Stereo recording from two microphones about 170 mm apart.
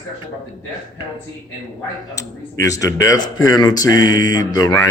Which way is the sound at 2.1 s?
20° left (ahead or behind).